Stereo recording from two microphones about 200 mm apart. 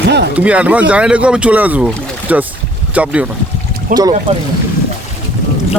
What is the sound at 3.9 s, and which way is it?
Speech, 40° right (ahead or behind).